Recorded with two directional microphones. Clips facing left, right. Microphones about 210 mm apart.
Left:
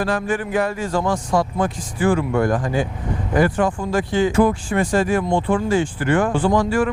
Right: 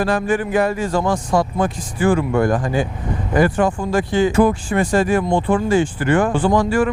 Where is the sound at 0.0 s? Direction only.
10° right (ahead or behind).